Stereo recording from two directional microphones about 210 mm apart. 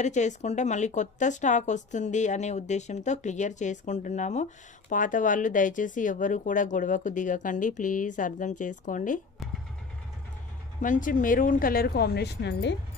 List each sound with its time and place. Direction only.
0.0 s speech: 35° left (ahead or behind)
10.8 s speech: 40° left (ahead or behind); by 12.7 s 55° left (ahead or behind)